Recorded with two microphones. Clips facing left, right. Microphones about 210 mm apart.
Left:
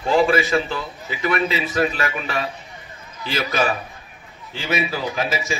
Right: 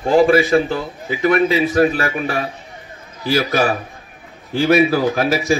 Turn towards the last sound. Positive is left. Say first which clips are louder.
# right 8 dB
turn(degrees=-55)  # may be behind; listen again after turning